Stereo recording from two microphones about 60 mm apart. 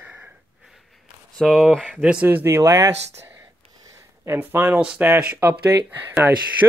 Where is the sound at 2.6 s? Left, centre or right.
Right.